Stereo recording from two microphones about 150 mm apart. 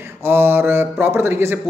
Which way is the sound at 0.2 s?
15° right (ahead or behind).